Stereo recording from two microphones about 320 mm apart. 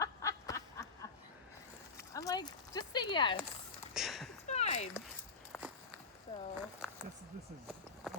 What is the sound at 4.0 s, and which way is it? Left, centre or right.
Speech, centre.